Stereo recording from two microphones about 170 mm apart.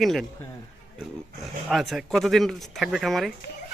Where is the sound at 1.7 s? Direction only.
Centre (ahead or behind).